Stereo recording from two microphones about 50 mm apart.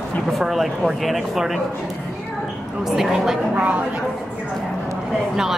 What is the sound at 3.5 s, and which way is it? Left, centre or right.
Speech, right.